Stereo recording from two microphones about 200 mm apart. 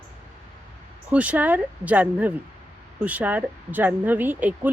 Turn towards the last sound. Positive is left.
turn(degrees=-10)  # may be behind; listen again after turning